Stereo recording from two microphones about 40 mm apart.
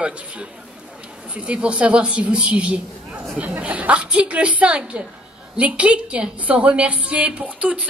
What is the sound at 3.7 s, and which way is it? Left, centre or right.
A woman's voice, right.